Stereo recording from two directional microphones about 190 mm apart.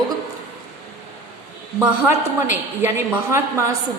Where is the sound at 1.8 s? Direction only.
10° right (ahead or behind).